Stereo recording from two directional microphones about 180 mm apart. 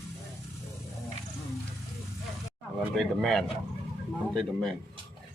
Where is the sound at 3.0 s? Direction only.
Centre (ahead or behind).